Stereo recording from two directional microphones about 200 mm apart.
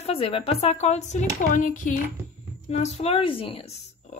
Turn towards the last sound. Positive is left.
turn(degrees=30)  # may be behind; listen again after turning